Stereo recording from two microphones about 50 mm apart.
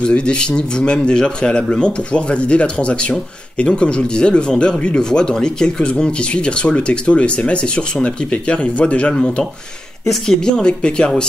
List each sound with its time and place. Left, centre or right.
0.0 s speech: centre
10.2 s speech: centre